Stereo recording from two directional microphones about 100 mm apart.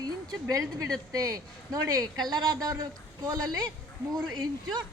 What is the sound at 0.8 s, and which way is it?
Speech, 5° left (ahead or behind).